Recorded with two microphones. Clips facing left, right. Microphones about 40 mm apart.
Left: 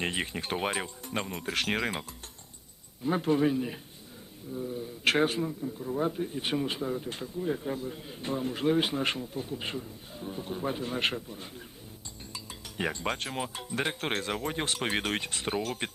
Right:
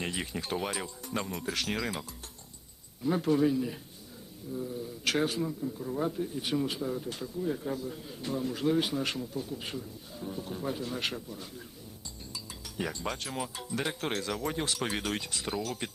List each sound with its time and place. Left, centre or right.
0.0 s speech: left
4.5 s speech: centre
5.0 s speech: left
5.6 s speech: centre
6.1 s speech: left